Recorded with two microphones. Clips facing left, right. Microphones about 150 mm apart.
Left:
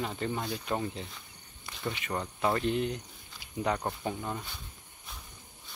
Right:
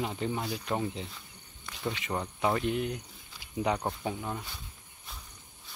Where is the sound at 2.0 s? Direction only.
10° right (ahead or behind).